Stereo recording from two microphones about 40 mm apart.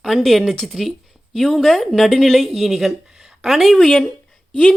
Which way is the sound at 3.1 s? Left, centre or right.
Centre.